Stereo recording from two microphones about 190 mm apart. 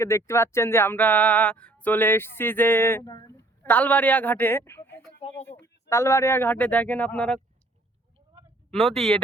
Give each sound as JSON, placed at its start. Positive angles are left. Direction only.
{"t": 0.0, "sound": "speech", "side_deg": 15}
{"t": 8.7, "sound": "speech", "side_deg": 0}